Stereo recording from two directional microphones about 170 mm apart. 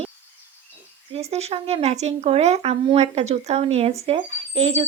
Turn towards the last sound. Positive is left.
turn(degrees=-40)  # may be behind; listen again after turning